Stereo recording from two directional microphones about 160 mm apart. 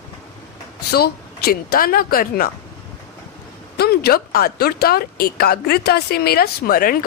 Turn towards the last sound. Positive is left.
turn(degrees=65)  # may be behind; listen again after turning